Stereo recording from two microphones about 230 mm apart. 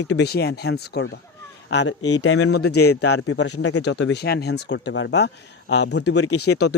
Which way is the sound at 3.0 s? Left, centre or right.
Left.